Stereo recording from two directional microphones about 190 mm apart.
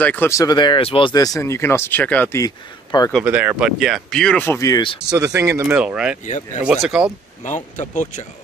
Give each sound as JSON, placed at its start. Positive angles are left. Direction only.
{"t": 0.0, "sound": "speech", "side_deg": 10}
{"t": 3.3, "sound": "speech", "side_deg": -10}
{"t": 5.0, "sound": "speech", "side_deg": -20}
{"t": 6.2, "sound": "speech", "side_deg": 40}
{"t": 6.6, "sound": "speech", "side_deg": -5}
{"t": 7.4, "sound": "speech", "side_deg": 40}